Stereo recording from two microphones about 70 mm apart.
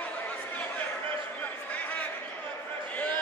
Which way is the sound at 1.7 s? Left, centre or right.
Left.